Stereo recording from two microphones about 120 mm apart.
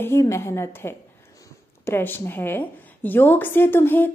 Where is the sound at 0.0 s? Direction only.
25° left (ahead or behind).